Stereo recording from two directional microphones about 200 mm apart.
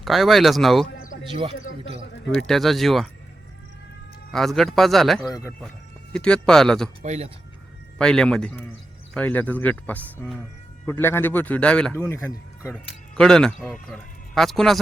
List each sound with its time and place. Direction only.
0.0 s speech: centre (ahead or behind)
1.3 s speech: 25° right (ahead or behind)
2.5 s speech: centre (ahead or behind)
4.3 s speech: centre (ahead or behind)
5.3 s speech: 10° left (ahead or behind)
7.0 s speech: 35° right (ahead or behind)
7.9 s speech: 5° left (ahead or behind)